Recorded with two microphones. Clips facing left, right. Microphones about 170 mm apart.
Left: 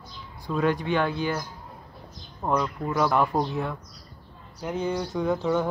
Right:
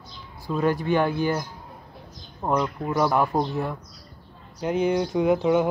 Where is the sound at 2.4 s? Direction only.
15° right (ahead or behind); by 3.7 s centre (ahead or behind).